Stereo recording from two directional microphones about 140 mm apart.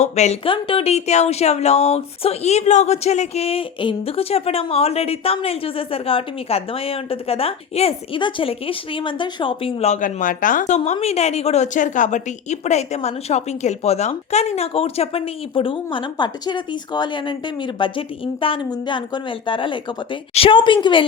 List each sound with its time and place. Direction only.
0.0 s a woman's voice: 50° left (ahead or behind)
9.9 s speech: 70° left (ahead or behind)
10.8 s a woman's voice: 50° left (ahead or behind)